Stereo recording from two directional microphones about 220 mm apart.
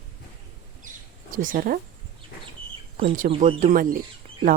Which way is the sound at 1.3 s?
40° right (ahead or behind).